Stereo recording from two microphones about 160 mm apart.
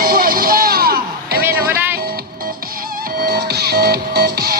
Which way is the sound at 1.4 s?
15° right (ahead or behind).